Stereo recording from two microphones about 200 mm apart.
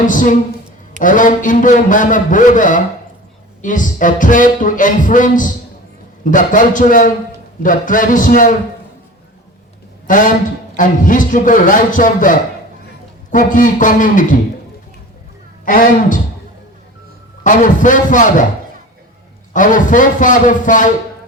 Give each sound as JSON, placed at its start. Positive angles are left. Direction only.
{"t": 0.0, "sound": "speech", "side_deg": 40}
{"t": 10.1, "sound": "speech", "side_deg": 40}
{"t": 15.6, "sound": "speech", "side_deg": 45}
{"t": 17.4, "sound": "speech", "side_deg": 40}
{"t": 19.5, "sound": "speech", "side_deg": 40}